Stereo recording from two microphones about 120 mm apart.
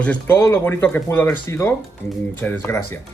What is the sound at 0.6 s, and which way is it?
Speech, 15° left (ahead or behind).